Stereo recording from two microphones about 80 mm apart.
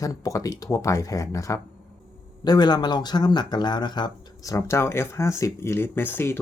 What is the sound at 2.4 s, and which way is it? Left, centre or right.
Speech, left.